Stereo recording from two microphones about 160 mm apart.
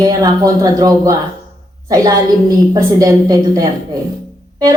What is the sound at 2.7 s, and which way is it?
Speech, 20° right (ahead or behind).